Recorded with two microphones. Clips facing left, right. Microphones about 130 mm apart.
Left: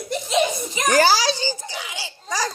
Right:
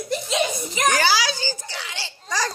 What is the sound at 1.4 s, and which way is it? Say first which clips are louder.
Speech: left 3 dB; 20° left (ahead or behind).